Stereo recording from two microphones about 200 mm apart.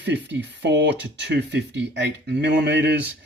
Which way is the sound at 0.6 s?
60° right (ahead or behind).